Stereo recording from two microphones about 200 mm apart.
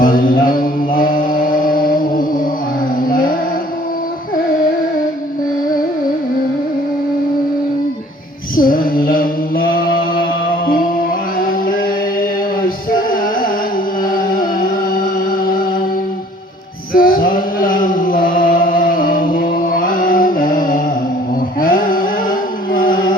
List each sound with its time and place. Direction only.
0.0 s mantra: 45° left (ahead or behind)
1.8 s music: 45° left (ahead or behind)
8.5 s music: 45° left (ahead or behind)
12.6 s music: 45° left (ahead or behind)
16.9 s mantra: 45° left (ahead or behind)
18.9 s music: 45° left (ahead or behind)